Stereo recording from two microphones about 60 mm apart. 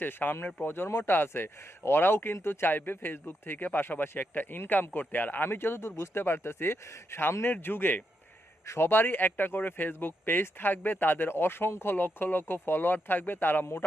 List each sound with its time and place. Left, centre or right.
0.0 s speech: left
7.4 s speech: left